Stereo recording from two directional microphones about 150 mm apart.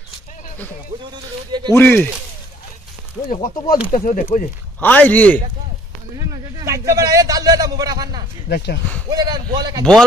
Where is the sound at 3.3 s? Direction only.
60° left (ahead or behind).